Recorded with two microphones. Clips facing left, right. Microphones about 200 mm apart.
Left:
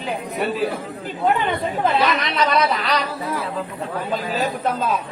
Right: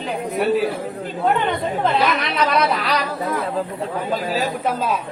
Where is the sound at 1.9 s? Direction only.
Centre (ahead or behind).